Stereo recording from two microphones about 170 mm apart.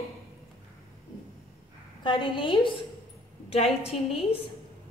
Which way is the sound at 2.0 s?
30° left (ahead or behind).